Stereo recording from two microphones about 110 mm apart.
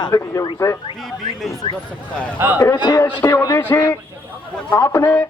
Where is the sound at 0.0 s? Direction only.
30° left (ahead or behind).